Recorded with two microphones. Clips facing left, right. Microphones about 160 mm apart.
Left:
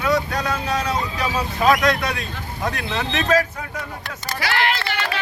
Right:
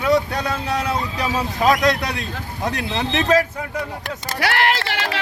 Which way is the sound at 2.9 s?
20° right (ahead or behind).